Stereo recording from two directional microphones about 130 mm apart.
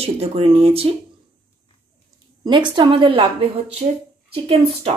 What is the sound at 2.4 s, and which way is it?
Speech, 35° right (ahead or behind).